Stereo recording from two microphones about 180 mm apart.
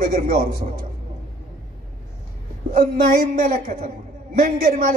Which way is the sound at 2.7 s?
50° right (ahead or behind).